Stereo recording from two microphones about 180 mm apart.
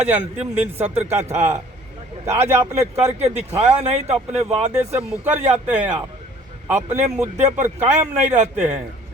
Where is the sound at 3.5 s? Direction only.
35° right (ahead or behind).